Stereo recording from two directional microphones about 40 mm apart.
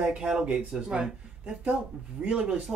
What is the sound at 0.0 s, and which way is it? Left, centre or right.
A woman's voice, right.